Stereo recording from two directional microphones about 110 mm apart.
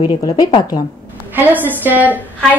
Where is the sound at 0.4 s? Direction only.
50° left (ahead or behind).